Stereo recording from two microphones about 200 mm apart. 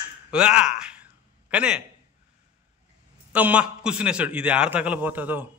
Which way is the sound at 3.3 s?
5° right (ahead or behind).